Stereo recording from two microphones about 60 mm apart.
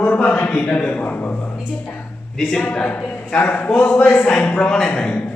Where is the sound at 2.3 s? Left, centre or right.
Centre.